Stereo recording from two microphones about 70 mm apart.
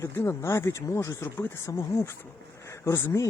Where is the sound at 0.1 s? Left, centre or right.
Left.